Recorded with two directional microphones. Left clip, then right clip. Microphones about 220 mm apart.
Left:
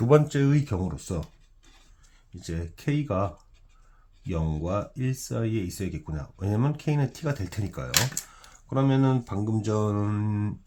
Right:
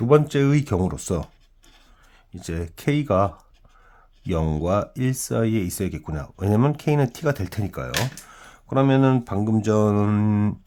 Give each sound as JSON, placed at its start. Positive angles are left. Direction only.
{"t": 0.3, "sound": "speech", "side_deg": -35}
{"t": 2.3, "sound": "speech", "side_deg": -40}